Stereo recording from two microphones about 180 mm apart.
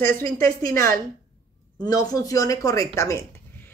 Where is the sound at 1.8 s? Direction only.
20° left (ahead or behind).